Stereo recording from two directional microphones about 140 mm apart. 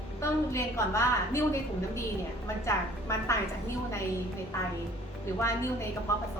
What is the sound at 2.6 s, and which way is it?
Speech, 20° left (ahead or behind).